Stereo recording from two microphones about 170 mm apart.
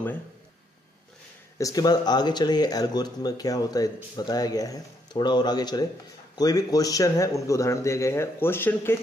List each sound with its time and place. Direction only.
1.6 s a man's voice: 20° left (ahead or behind)